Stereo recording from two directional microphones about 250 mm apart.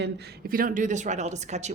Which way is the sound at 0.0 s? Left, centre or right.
Right.